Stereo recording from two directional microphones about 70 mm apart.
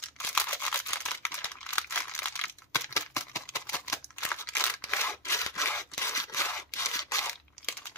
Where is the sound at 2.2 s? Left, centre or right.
Left.